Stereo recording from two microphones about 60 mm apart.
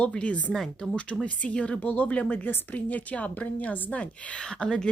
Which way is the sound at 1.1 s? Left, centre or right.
Centre.